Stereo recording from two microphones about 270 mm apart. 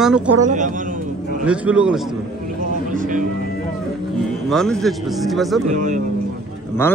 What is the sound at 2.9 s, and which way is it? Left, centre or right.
Music, right.